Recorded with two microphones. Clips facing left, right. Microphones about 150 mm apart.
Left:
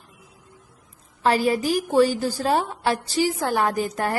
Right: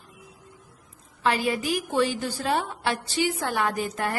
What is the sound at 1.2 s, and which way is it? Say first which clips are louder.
A woman's voice: left 4 dB; 40° left (ahead or behind).